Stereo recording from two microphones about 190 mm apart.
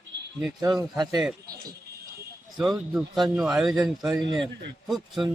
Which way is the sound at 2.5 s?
Centre (ahead or behind).